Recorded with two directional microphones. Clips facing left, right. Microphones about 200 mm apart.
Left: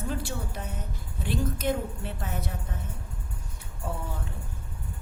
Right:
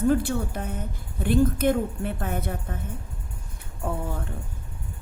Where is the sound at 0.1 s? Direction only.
55° right (ahead or behind).